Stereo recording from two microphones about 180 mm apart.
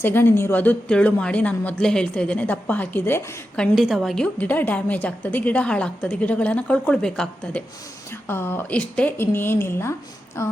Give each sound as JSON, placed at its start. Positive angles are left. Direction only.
{"t": 0.0, "sound": "a woman's voice", "side_deg": 10}